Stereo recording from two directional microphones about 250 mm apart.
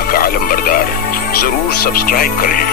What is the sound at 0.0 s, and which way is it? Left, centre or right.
Speech, left.